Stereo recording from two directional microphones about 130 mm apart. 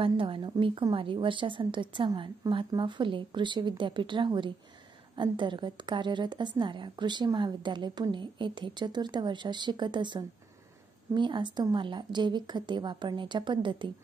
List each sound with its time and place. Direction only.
0.0 s a woman's voice: 45° right (ahead or behind)